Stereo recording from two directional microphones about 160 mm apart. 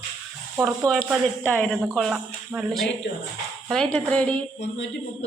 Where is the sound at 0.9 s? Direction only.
Centre (ahead or behind).